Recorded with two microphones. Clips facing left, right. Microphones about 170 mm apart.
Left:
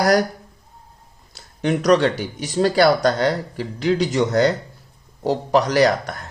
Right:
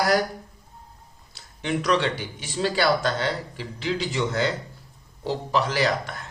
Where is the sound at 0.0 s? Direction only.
40° left (ahead or behind).